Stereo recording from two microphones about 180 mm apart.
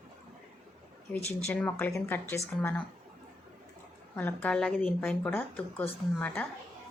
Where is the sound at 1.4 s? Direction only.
10° left (ahead or behind).